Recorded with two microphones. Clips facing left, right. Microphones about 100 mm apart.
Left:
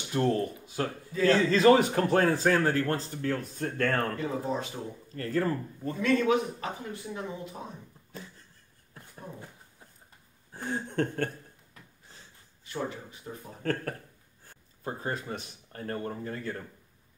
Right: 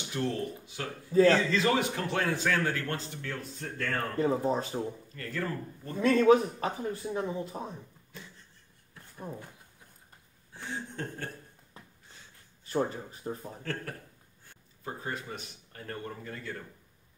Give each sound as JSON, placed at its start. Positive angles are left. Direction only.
{"t": 0.1, "sound": "speech", "side_deg": 40}
{"t": 1.1, "sound": "a man's voice", "side_deg": -35}
{"t": 1.5, "sound": "speech", "side_deg": 40}
{"t": 4.2, "sound": "a man's voice", "side_deg": -35}
{"t": 5.1, "sound": "speech", "side_deg": 35}
{"t": 5.9, "sound": "a man's voice", "side_deg": -35}
{"t": 10.5, "sound": "speech", "side_deg": 45}
{"t": 11.7, "sound": "a sound", "side_deg": -30}
{"t": 12.6, "sound": "a man's voice", "side_deg": -40}
{"t": 13.6, "sound": "speech", "side_deg": 45}